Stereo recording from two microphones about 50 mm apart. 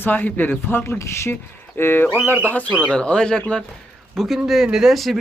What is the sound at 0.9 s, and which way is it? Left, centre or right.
Speech, left.